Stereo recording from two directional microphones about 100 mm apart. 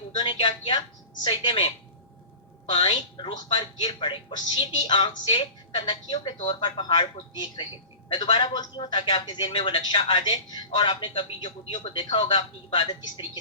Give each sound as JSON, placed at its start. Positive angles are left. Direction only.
{"t": 0.2, "sound": "speech", "side_deg": 65}
{"t": 1.2, "sound": "speech", "side_deg": 55}
{"t": 2.6, "sound": "a woman's voice", "side_deg": 65}
{"t": 8.1, "sound": "a woman's voice", "side_deg": 60}